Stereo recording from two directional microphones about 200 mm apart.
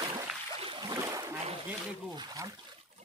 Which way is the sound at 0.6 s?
25° right (ahead or behind).